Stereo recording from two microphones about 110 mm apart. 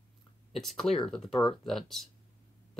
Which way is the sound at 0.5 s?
Centre (ahead or behind).